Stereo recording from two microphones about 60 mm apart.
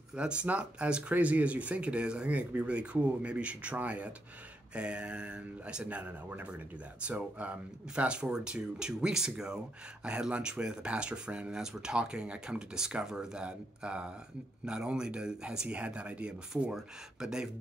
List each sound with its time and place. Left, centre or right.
0.1 s speech: centre